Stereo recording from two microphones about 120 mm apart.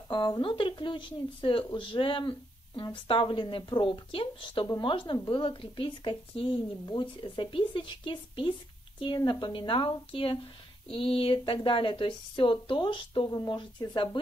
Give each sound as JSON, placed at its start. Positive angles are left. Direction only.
{"t": 0.1, "sound": "speech", "side_deg": 40}